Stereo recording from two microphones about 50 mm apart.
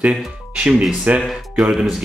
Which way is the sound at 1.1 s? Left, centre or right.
Right.